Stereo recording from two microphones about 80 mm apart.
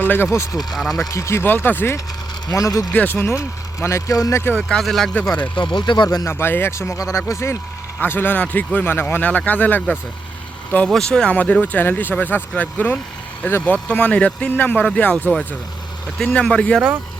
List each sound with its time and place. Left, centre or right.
0.0 s speech: left
0.5 s speech: centre
1.1 s speech: left
2.5 s speech: left
2.9 s speech: centre
3.2 s speech: left
4.8 s speech: centre
5.4 s speech: left
6.2 s speech: left
7.9 s speech: left
10.8 s speech: centre
16.1 s speech: centre